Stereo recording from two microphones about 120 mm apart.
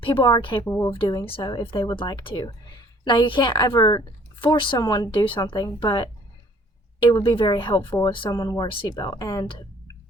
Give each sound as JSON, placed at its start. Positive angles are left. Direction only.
{"t": 0.0, "sound": "speech", "side_deg": 45}
{"t": 0.6, "sound": "speech", "side_deg": 25}
{"t": 0.9, "sound": "a woman's voice", "side_deg": 35}
{"t": 7.2, "sound": "a woman's voice", "side_deg": 45}
{"t": 8.7, "sound": "speech", "side_deg": 45}
{"t": 9.0, "sound": "speech", "side_deg": 35}